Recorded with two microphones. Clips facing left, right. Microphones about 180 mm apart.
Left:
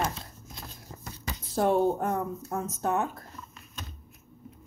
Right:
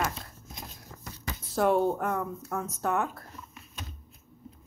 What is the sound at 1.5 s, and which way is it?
Speech, 25° left (ahead or behind).